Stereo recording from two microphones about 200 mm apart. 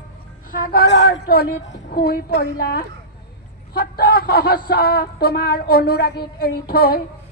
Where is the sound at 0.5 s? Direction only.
45° left (ahead or behind).